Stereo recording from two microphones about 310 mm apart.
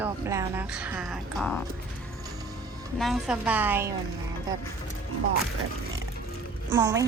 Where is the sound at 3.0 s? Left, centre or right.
Centre.